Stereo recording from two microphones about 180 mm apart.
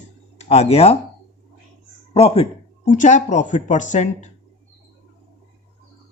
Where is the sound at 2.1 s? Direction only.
35° left (ahead or behind).